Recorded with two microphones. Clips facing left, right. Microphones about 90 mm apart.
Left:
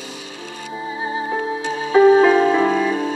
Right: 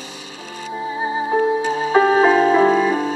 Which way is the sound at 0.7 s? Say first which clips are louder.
Right 3 dB; 5° right (ahead or behind).